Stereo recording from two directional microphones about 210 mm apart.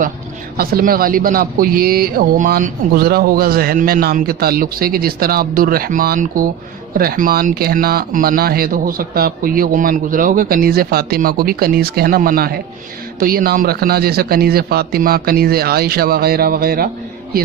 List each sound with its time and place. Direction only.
0.5 s a man's voice: 45° right (ahead or behind)